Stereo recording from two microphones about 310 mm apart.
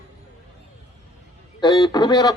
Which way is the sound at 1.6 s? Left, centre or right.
Centre.